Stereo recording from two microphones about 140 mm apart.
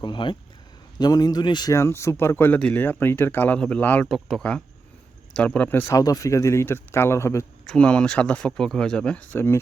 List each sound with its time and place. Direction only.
0.0 s speech: 35° left (ahead or behind); by 4.0 s 10° left (ahead or behind)
4.0 s speech: centre (ahead or behind); by 7.4 s 20° left (ahead or behind)
7.7 s speech: 5° left (ahead or behind)